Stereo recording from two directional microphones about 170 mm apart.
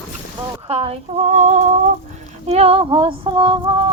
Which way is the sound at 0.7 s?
35° right (ahead or behind).